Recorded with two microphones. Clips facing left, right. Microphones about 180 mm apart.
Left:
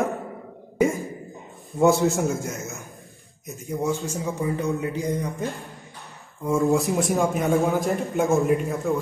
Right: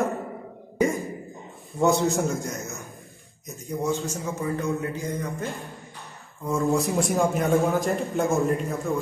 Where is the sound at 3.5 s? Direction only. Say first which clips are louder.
Left 1 dB; 10° left (ahead or behind).